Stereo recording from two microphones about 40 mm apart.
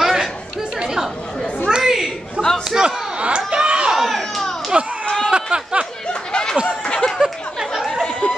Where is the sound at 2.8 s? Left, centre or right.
Right.